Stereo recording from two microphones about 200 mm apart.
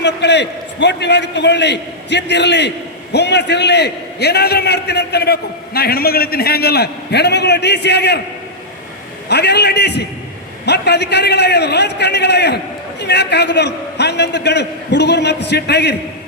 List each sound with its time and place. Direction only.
0.0 s a man's voice: 60° left (ahead or behind)
9.3 s a man's voice: 55° left (ahead or behind)